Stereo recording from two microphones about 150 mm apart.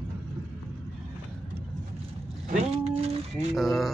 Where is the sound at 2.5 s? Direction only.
45° right (ahead or behind).